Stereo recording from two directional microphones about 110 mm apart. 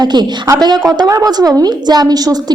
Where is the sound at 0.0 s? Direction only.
40° right (ahead or behind).